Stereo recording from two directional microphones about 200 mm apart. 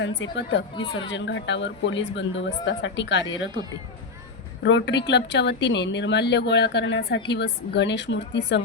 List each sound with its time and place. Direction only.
0.0 s speech: 65° left (ahead or behind)
4.6 s speech: 60° left (ahead or behind)